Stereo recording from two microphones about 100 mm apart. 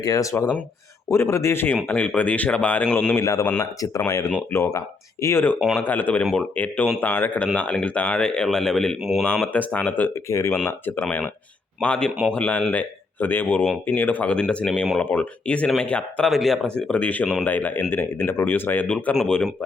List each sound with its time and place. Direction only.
0.0 s speech: 35° left (ahead or behind)
1.7 s speech: 15° left (ahead or behind)
3.2 s speech: 30° left (ahead or behind); by 9.2 s centre (ahead or behind)
9.2 s speech: 15° left (ahead or behind)
10.2 s speech: 30° left (ahead or behind)
10.7 s speech: 20° left (ahead or behind); by 16.7 s centre (ahead or behind)
16.9 s speech: 15° left (ahead or behind)